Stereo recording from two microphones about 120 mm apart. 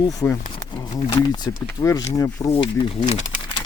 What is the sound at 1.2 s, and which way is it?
Speech, 35° left (ahead or behind).